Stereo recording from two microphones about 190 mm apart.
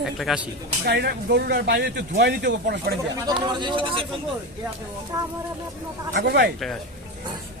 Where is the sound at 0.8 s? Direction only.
60° right (ahead or behind).